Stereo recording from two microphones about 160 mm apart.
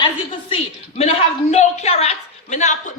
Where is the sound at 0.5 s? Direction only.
40° left (ahead or behind).